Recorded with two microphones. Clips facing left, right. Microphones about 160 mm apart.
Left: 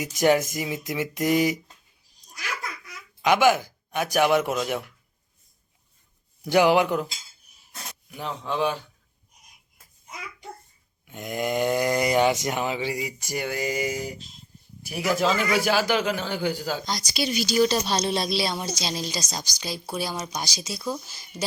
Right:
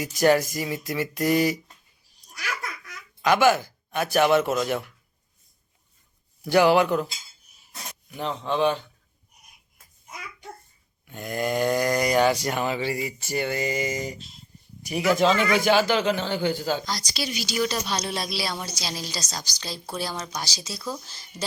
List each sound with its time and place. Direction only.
0.0 s speech: 20° left (ahead or behind)
3.2 s a man's voice: 15° left (ahead or behind)
6.5 s speech: 15° left (ahead or behind)
8.1 s speech: 5° left (ahead or behind)
11.0 s speech: 20° left (ahead or behind)
17.3 s speech: 40° left (ahead or behind); by 21.4 s 15° left (ahead or behind)